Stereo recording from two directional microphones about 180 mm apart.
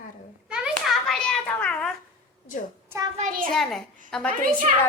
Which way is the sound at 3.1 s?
45° right (ahead or behind).